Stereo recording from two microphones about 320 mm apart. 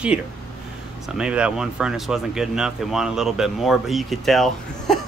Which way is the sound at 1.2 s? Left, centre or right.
Centre.